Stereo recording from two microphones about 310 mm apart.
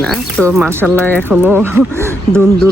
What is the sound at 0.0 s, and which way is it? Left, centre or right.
Speech, centre.